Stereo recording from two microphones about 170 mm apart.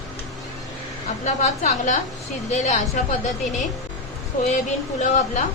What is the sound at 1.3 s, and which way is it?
A woman's voice, 45° left (ahead or behind).